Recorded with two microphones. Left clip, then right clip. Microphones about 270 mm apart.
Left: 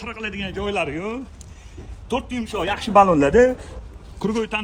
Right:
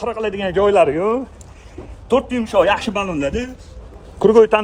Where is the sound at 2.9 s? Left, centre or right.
Left.